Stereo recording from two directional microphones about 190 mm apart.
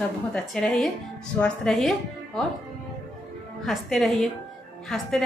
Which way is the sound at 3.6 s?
Centre (ahead or behind).